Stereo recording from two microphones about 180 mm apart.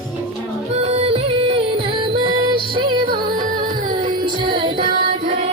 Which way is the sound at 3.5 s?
50° right (ahead or behind).